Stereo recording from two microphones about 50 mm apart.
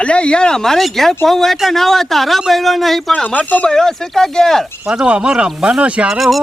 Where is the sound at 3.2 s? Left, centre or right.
Left.